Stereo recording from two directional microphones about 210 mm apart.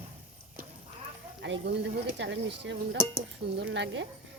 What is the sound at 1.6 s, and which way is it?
Speech, 55° right (ahead or behind).